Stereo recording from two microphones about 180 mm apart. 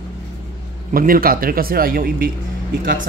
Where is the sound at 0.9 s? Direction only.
55° right (ahead or behind).